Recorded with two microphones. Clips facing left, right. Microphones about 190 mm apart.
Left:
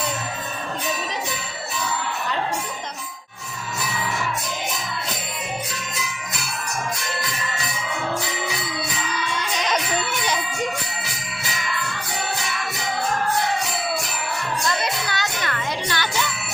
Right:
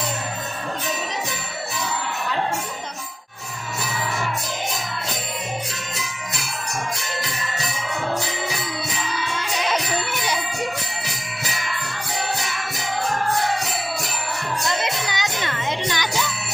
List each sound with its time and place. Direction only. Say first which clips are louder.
9.6 s music: right 1 dB; 10° right (ahead or behind)
14.7 s music: right 1 dB; 20° right (ahead or behind)